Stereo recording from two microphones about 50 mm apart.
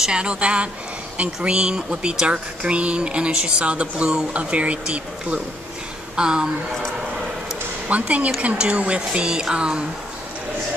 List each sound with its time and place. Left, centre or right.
0.0 s speech: centre
7.9 s speech: right